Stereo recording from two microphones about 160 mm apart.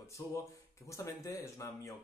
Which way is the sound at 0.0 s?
20° left (ahead or behind).